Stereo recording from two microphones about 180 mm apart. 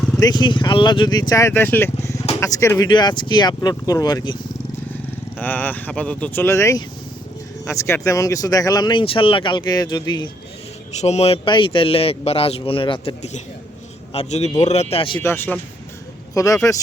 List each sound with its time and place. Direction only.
0.2 s speech: 25° left (ahead or behind)
5.4 s speech: 10° left (ahead or behind)
11.0 s speech: 35° left (ahead or behind)
15.2 s speech: 15° left (ahead or behind)